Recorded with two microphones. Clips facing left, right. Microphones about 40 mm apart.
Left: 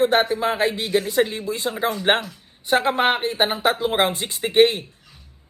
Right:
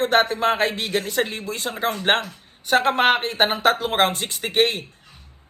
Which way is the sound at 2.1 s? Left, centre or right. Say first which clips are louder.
Even; right.